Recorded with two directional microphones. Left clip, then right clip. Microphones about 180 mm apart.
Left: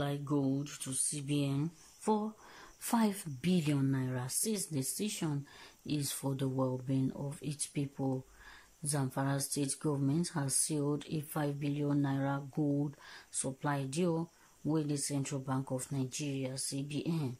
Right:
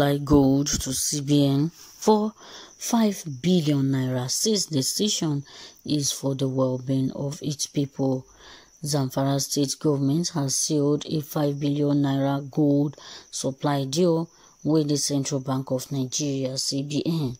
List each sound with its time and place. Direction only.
0.0 s speech: 50° right (ahead or behind)
1.6 s speech: 30° right (ahead or behind)
2.9 s speech: 20° right (ahead or behind)